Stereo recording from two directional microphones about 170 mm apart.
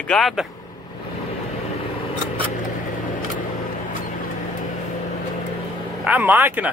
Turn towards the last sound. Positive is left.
turn(degrees=-10)  # may be behind; listen again after turning